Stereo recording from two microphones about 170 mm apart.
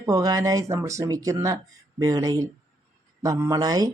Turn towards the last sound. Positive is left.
turn(degrees=-20)  # may be behind; listen again after turning